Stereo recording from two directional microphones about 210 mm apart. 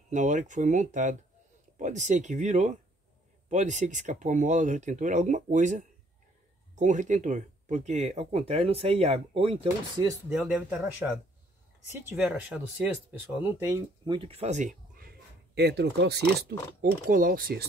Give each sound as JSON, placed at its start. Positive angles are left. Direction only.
{"t": 0.1, "sound": "speech", "side_deg": -35}
{"t": 10.3, "sound": "speech", "side_deg": -5}